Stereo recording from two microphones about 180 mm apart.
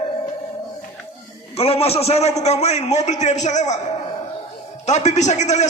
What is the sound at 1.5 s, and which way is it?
A man's voice, 35° left (ahead or behind).